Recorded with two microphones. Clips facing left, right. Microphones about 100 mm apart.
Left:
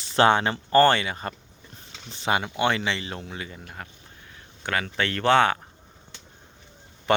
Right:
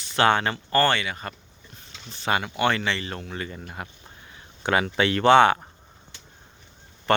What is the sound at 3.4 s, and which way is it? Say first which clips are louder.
Speech: right 3 dB; 5° left (ahead or behind).